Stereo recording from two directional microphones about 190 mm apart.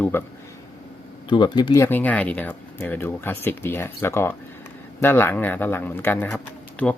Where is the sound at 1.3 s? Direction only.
25° left (ahead or behind).